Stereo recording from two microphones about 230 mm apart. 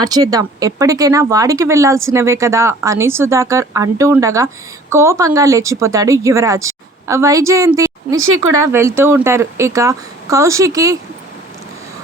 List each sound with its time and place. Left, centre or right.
0.0 s speech: centre
8.1 s speech: right
8.6 s speech: centre